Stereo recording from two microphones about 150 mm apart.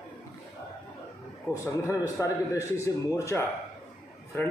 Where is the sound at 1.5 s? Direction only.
20° left (ahead or behind).